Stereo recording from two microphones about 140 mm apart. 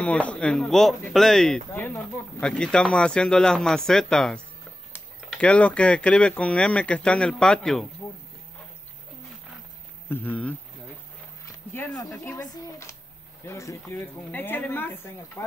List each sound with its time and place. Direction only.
0.0 s speech: 10° left (ahead or behind)
1.7 s speech: 15° left (ahead or behind)
10.0 s speech: 15° left (ahead or behind)
11.9 s speech: 10° left (ahead or behind)
12.4 s speech: 25° left (ahead or behind)